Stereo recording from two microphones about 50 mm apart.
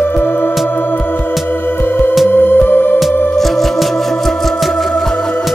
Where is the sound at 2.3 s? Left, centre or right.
Left.